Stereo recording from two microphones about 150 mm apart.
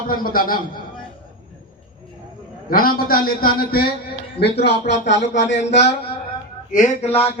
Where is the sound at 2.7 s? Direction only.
80° left.